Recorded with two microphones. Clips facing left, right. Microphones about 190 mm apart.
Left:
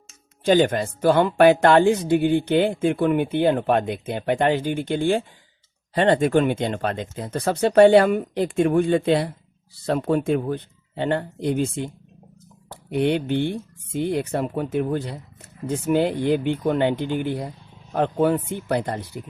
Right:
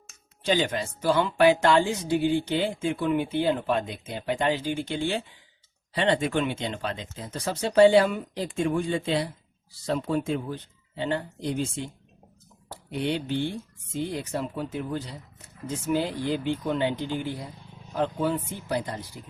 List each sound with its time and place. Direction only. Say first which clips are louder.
0.4 s speech: left 8 dB; 50° left (ahead or behind)
12.9 s speech: left 7 dB; 55° left (ahead or behind)